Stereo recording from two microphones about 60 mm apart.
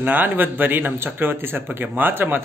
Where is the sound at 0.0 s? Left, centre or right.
Right.